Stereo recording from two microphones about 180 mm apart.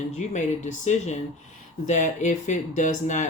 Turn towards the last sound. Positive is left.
turn(degrees=40)  # may be behind; listen again after turning